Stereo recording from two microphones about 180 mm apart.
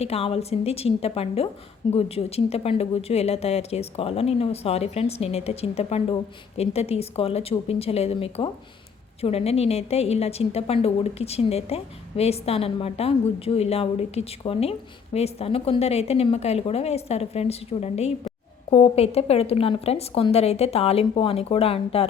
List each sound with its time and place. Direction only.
0.0 s a woman's voice: 35° left (ahead or behind)